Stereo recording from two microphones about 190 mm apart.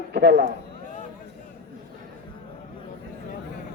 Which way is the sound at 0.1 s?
60° right (ahead or behind).